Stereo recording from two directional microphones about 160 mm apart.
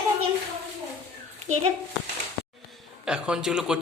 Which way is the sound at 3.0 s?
5° right (ahead or behind).